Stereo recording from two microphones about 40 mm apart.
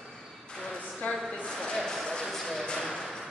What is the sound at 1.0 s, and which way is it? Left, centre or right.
Speech, left.